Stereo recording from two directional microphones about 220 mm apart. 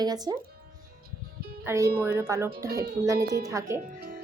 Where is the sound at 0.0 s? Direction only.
20° right (ahead or behind).